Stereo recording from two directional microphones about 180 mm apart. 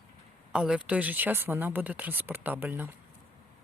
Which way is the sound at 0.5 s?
5° right (ahead or behind).